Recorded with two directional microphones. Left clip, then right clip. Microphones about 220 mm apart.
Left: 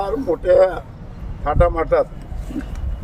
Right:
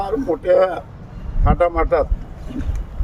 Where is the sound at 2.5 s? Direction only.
50° right (ahead or behind).